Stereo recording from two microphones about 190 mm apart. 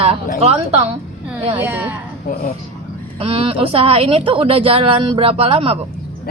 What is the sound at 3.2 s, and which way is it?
A woman's voice, 30° right (ahead or behind).